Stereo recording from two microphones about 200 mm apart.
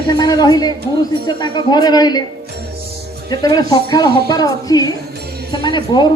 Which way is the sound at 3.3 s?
20° left (ahead or behind).